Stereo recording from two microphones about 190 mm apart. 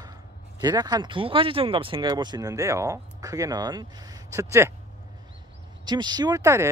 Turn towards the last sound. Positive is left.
turn(degrees=-15)  # may be behind; listen again after turning